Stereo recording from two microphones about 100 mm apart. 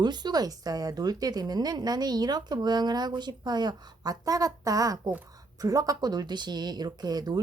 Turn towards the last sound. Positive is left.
turn(degrees=-45)  # may be behind; listen again after turning